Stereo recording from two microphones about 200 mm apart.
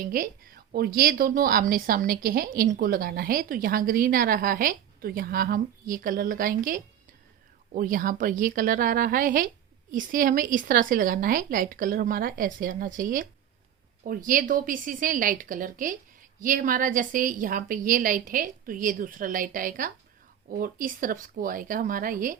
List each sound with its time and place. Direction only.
0.0 s a woman's voice: 45° right (ahead or behind)